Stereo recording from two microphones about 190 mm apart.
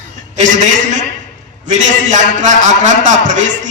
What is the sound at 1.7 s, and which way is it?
A man's voice, 40° right (ahead or behind).